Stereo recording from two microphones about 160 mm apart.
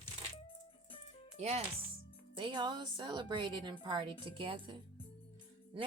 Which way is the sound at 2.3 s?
30° right (ahead or behind).